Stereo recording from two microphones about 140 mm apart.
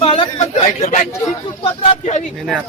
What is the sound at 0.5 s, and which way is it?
Speech, 55° left (ahead or behind).